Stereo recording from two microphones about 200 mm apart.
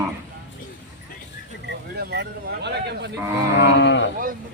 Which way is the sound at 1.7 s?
55° right (ahead or behind).